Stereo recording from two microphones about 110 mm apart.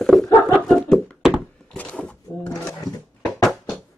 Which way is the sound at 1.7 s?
10° left (ahead or behind).